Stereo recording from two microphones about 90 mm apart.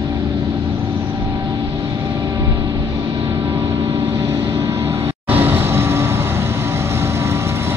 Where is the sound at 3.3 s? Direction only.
25° right (ahead or behind).